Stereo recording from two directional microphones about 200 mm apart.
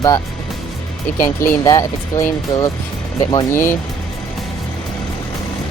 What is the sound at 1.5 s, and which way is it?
Speech, 15° left (ahead or behind).